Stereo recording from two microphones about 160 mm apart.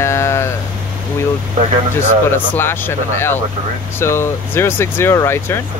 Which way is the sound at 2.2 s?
15° left (ahead or behind).